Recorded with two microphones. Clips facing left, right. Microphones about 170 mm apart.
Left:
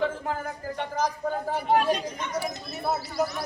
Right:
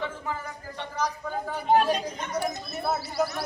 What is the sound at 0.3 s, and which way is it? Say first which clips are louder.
A man's voice: left 3 dB; 50° left (ahead or behind).